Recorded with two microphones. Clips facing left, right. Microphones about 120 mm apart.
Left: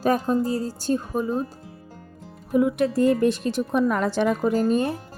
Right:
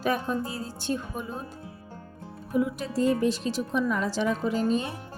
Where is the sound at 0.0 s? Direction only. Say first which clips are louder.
Left 6 dB; 40° left (ahead or behind).